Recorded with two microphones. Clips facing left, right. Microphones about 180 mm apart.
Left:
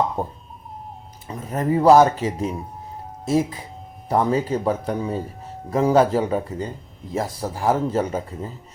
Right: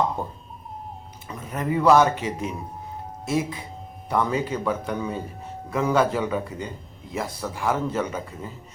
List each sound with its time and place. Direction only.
1.3 s speech: 35° left (ahead or behind)